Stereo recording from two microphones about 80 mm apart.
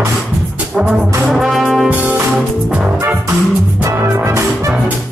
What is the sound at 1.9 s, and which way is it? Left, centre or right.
Music, right.